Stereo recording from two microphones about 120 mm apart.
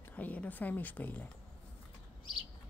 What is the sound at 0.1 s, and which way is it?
Speech, 15° left (ahead or behind).